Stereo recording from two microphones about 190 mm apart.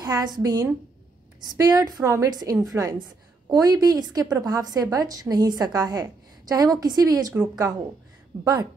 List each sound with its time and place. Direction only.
0.0 s a woman's voice: 20° right (ahead or behind)